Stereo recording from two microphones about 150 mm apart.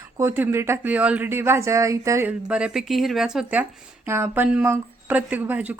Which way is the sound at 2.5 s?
5° right (ahead or behind).